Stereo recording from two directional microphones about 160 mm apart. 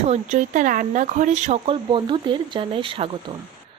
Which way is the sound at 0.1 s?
50° right (ahead or behind).